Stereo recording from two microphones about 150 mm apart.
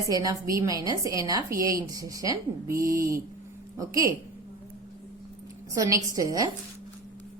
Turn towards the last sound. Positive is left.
turn(degrees=-25)  # may be behind; listen again after turning